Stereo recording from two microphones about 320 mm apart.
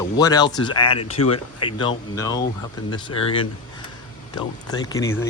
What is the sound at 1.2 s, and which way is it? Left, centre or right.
Speech, left.